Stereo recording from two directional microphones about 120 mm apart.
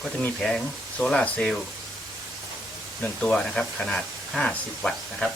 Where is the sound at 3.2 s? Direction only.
5° left (ahead or behind).